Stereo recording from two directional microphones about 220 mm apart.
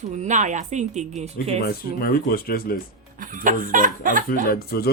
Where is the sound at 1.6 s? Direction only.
45° left (ahead or behind).